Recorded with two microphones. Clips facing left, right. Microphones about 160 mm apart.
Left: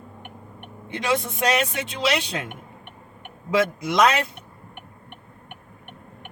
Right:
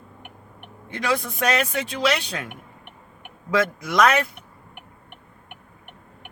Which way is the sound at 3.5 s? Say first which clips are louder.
Left 1 dB; 20° left (ahead or behind).